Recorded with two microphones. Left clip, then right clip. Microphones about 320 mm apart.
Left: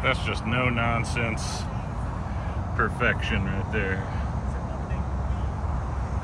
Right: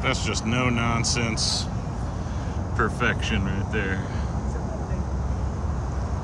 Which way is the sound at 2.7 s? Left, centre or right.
Centre.